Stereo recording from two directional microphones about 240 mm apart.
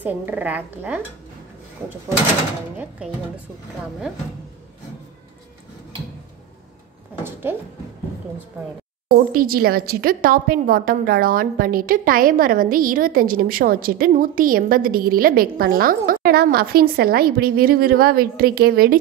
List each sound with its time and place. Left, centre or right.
0.0 s speech: centre
7.5 s speech: centre
9.3 s a woman's voice: right